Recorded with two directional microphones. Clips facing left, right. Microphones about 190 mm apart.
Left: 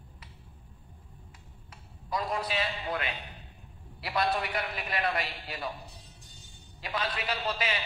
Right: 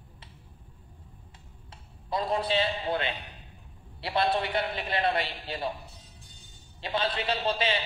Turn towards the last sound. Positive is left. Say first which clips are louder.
# right 4 dB
turn(degrees=-25)  # may be behind; listen again after turning